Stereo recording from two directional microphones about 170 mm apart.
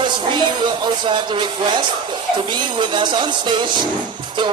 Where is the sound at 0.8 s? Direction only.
30° right (ahead or behind).